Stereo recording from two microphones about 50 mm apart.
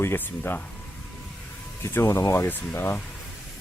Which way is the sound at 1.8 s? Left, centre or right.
Left.